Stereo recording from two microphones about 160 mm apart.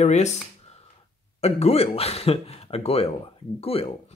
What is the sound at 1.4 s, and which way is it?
Speech, 40° left (ahead or behind).